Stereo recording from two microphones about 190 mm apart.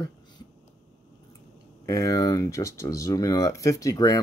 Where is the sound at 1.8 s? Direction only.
20° left (ahead or behind).